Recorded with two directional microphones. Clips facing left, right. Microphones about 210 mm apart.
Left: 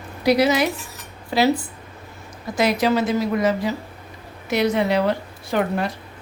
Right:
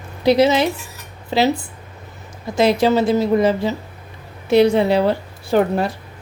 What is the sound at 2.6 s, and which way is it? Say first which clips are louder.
A woman's voice: right 4 dB; 30° right (ahead or behind).